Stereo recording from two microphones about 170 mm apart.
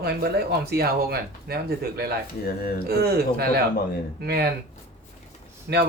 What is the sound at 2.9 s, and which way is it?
Speech, 70° right (ahead or behind).